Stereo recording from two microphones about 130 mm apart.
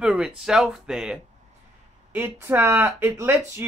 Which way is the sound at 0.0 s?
5° right (ahead or behind).